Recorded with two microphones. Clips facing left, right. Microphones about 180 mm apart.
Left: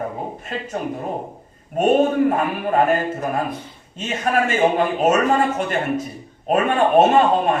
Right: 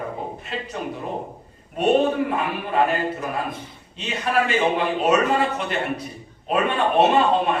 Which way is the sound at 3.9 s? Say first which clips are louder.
Left 2 dB; 45° left (ahead or behind).